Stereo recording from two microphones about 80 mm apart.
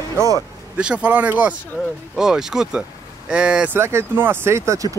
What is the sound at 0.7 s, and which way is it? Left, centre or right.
Speech, centre.